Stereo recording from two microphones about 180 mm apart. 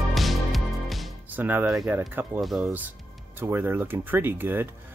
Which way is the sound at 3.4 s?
10° right (ahead or behind).